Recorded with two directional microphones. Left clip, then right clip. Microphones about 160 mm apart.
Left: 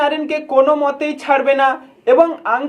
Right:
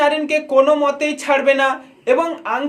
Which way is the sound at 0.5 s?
25° right (ahead or behind).